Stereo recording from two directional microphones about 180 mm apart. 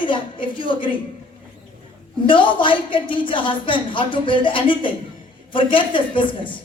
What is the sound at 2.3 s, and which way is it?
A woman's voice, 30° left (ahead or behind).